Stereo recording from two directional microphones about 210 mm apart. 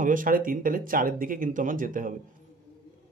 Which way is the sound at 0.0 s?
40° right (ahead or behind).